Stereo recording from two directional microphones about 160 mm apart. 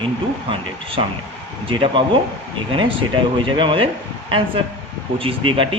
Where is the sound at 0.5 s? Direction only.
35° right (ahead or behind).